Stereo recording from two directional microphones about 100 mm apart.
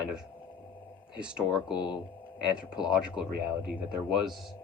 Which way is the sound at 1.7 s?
50° left (ahead or behind).